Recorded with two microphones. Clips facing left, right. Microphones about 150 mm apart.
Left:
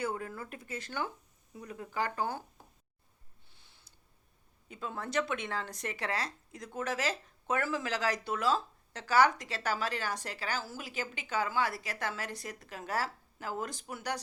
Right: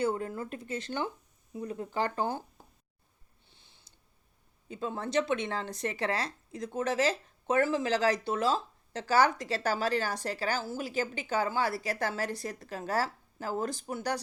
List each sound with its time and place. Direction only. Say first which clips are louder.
0.0 s speech: right 5 dB; 30° right (ahead or behind)
3.5 s a sound: right 2 dB; 20° right (ahead or behind)
4.7 s speech: right 4 dB; 30° right (ahead or behind)